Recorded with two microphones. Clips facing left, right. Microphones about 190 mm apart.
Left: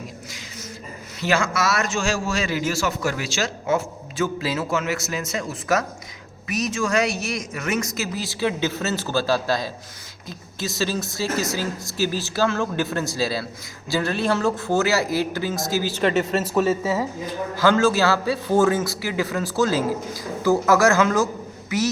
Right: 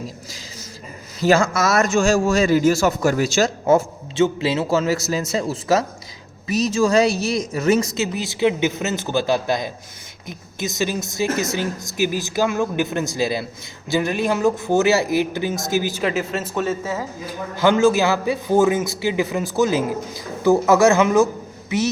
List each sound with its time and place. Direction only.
1.2 s a man's voice: 40° right (ahead or behind)
4.1 s a man's voice: 25° right (ahead or behind)
16.0 s a woman's voice: centre (ahead or behind)
17.6 s a man's voice: 20° right (ahead or behind)